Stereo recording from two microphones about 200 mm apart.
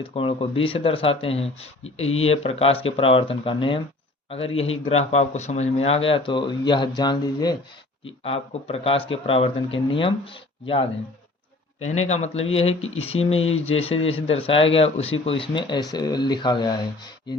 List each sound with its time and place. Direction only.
0.0 s speech: 25° left (ahead or behind)
11.9 s speech: 35° left (ahead or behind)